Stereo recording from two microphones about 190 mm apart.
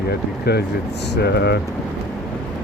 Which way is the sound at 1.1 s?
55° left (ahead or behind).